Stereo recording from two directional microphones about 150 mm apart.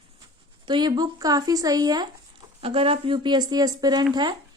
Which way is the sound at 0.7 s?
30° right (ahead or behind).